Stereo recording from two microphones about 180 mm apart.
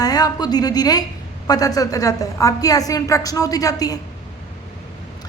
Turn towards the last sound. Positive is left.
turn(degrees=20)  # may be behind; listen again after turning